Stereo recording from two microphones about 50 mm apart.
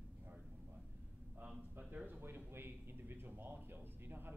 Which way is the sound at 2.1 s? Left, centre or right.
Right.